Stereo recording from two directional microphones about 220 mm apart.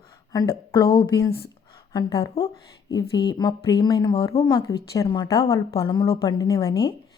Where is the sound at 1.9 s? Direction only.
20° left (ahead or behind).